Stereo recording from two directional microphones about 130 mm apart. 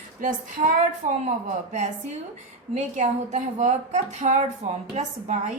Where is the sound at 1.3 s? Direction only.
60° right (ahead or behind).